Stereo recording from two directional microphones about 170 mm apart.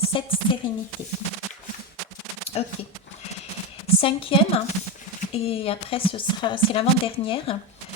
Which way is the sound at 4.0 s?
35° left (ahead or behind).